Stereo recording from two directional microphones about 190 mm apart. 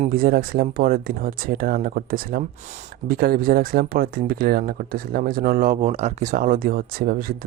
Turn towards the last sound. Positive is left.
turn(degrees=-50)  # may be behind; listen again after turning